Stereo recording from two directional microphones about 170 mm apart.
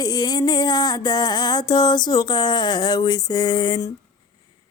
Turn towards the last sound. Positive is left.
turn(degrees=25)  # may be behind; listen again after turning